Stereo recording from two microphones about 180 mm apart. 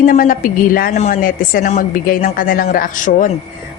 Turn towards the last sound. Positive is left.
turn(degrees=50)  # may be behind; listen again after turning